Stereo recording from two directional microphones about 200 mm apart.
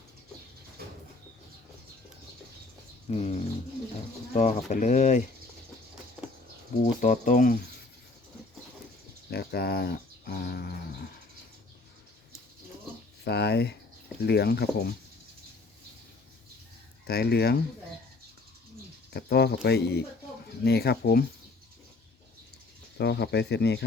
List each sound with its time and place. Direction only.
0.8 s a sound: 50° right (ahead or behind)
3.1 s speech: 30° left (ahead or behind)
4.4 s speech: 35° left (ahead or behind)
6.8 s speech: 40° left (ahead or behind)
9.3 s speech: 55° left (ahead or behind)
13.2 s speech: 55° left (ahead or behind)
17.1 s speech: 55° left (ahead or behind)
19.1 s speech: 55° left (ahead or behind)
23.0 s speech: 55° left (ahead or behind)